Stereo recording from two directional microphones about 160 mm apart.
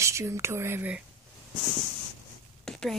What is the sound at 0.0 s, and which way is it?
Speech, 15° right (ahead or behind).